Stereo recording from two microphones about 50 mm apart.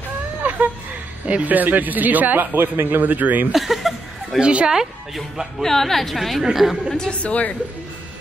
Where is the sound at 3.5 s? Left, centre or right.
Centre.